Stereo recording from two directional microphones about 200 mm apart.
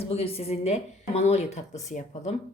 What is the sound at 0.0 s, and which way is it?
Speech, 30° left (ahead or behind).